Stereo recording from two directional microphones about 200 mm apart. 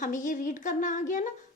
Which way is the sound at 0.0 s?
40° left (ahead or behind).